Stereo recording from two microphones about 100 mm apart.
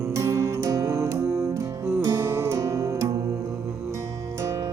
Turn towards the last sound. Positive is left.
turn(degrees=-30)  # may be behind; listen again after turning